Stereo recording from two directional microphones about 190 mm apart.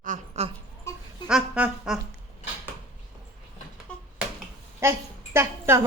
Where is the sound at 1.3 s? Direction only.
5° right (ahead or behind).